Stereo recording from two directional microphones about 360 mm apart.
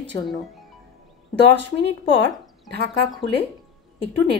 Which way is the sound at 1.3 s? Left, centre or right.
Right.